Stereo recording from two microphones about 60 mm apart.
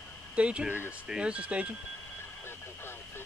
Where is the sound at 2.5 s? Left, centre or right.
Left.